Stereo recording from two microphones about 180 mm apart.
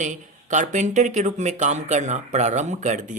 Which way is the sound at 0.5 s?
40° right (ahead or behind).